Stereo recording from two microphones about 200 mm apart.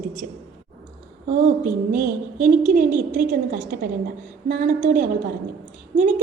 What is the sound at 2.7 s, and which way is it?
A woman's voice, 45° right (ahead or behind).